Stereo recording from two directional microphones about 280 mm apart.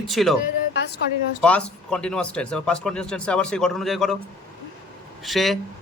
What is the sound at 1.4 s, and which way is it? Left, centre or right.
Speech, centre.